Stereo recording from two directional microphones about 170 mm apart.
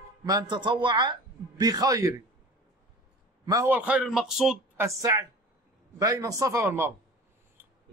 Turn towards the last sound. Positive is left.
turn(degrees=-15)  # may be behind; listen again after turning